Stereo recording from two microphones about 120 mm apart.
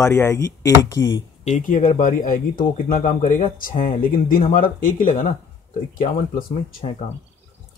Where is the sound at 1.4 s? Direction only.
90° left.